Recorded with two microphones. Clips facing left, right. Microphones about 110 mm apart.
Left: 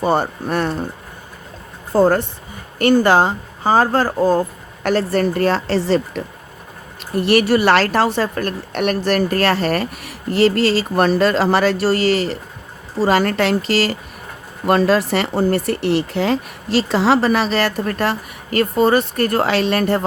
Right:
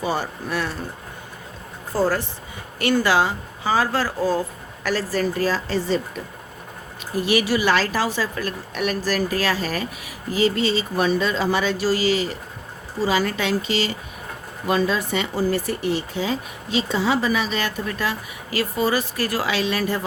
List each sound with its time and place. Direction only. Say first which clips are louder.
0.0 s a woman's voice: left 7 dB; 55° left (ahead or behind)
2.0 s a woman's voice: left 7 dB; 55° left (ahead or behind); by 6.2 s 75° left (ahead or behind)
7.3 s a woman's voice: left 6 dB; 60° left (ahead or behind)